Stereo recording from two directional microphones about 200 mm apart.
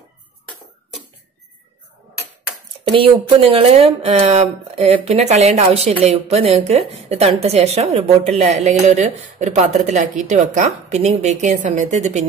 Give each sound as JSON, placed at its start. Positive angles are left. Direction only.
{"t": 2.8, "sound": "speech", "side_deg": -25}